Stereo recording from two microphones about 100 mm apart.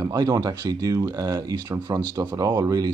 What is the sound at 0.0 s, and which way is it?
Speech, 40° right (ahead or behind).